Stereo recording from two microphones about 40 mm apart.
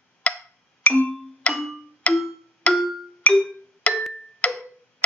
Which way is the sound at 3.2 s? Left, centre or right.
Left.